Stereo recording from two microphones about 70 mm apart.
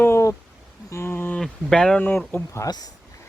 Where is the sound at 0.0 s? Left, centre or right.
Left.